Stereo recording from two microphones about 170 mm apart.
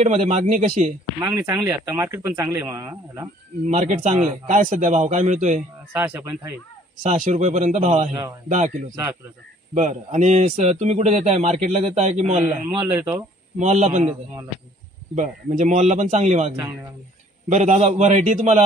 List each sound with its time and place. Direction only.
0.0 s a man's voice: 40° right (ahead or behind)
1.2 s a man's voice: 20° right (ahead or behind)
3.6 s a man's voice: 45° right (ahead or behind)
5.9 s a man's voice: 15° right (ahead or behind)
7.0 s a man's voice: 50° right (ahead or behind)
9.8 s a man's voice: 45° right (ahead or behind)
12.4 s a man's voice: 15° right (ahead or behind)
13.6 s a man's voice: 45° right (ahead or behind)
15.1 s a man's voice: 45° right (ahead or behind)